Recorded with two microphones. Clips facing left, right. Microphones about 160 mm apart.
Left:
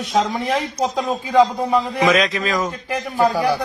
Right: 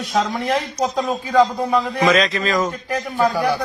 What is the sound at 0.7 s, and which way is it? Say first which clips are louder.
Speech: even; 15° left (ahead or behind).